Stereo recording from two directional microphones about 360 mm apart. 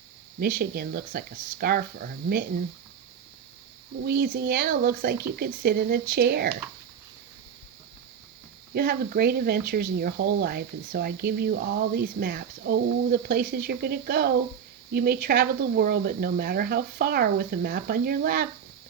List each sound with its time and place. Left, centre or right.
0.3 s speech: right
4.0 s speech: right
8.7 s speech: right